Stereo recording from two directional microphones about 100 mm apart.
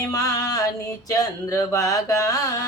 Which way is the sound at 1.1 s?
35° left (ahead or behind).